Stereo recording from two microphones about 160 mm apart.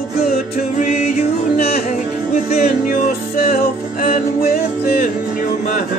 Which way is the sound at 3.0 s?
60° left (ahead or behind).